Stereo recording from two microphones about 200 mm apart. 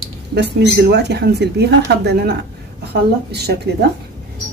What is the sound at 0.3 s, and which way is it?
A woman's voice, 55° right (ahead or behind).